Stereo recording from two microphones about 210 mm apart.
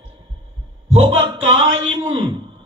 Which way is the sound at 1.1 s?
25° right (ahead or behind).